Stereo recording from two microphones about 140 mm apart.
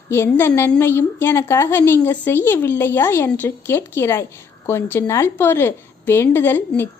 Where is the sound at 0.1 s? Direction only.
15° left (ahead or behind).